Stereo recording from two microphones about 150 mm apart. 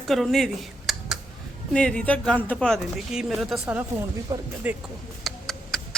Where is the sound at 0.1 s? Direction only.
Centre (ahead or behind).